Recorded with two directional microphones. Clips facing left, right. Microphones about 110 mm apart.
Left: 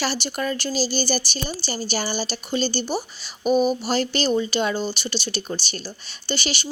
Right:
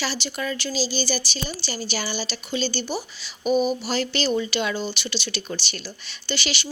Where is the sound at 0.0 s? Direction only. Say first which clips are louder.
Left 3 dB; 50° left (ahead or behind).